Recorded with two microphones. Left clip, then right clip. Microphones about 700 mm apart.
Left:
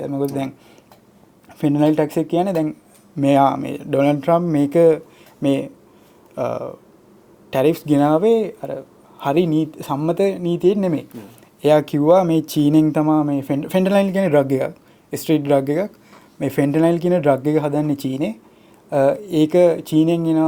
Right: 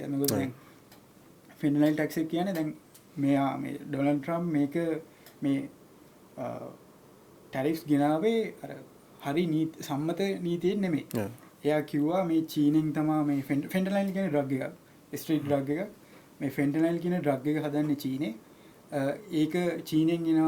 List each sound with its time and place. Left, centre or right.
1.5 s speech: left